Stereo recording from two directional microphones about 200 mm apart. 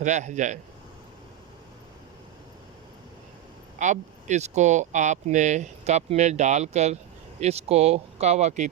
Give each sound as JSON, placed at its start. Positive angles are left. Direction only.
{"t": 0.0, "sound": "speech", "side_deg": -35}
{"t": 3.8, "sound": "speech", "side_deg": -35}